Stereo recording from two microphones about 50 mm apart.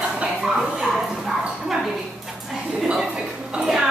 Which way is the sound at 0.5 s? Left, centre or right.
Centre.